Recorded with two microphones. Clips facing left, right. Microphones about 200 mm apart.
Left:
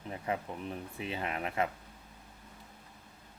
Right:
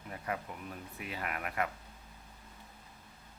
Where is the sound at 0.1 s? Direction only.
25° left (ahead or behind).